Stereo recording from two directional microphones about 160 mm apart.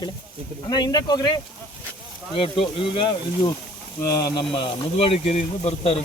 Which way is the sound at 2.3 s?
35° left (ahead or behind).